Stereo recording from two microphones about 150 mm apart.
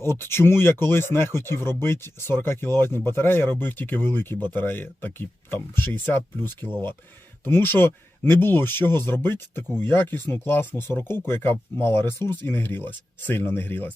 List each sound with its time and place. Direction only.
0.0 s speech: 15° left (ahead or behind)